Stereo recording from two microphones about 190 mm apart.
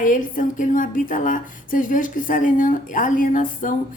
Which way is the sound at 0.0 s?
45° left (ahead or behind).